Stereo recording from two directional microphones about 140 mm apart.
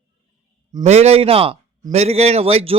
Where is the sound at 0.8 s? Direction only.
50° right (ahead or behind).